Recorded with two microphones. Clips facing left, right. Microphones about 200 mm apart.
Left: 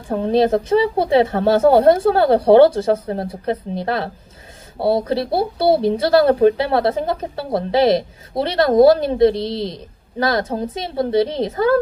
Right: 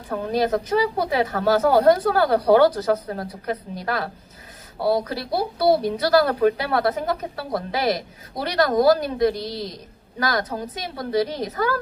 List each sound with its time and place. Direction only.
0.1 s speech: 30° left (ahead or behind)